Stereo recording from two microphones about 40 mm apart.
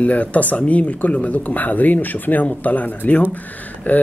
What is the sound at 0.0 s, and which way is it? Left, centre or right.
Speech, left.